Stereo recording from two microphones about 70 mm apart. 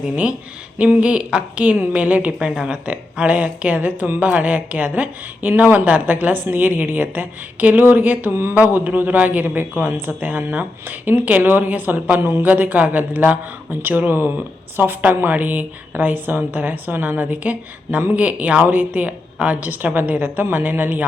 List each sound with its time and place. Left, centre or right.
0.8 s a woman's voice: centre; by 8.5 s right
8.5 s speech: right
12.2 s speech: right
12.5 s speech: right